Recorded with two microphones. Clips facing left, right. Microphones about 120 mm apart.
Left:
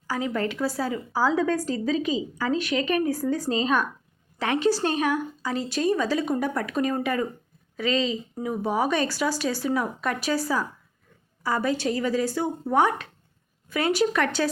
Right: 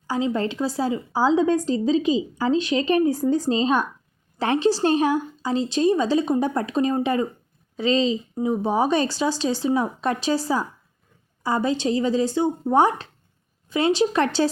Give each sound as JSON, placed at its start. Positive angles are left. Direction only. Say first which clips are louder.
{"t": 0.1, "sound": "a woman's voice", "louder": "right 3 dB", "side_deg": -25}